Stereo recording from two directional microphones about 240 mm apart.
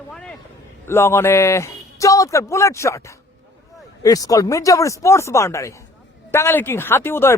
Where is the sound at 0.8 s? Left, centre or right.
Centre.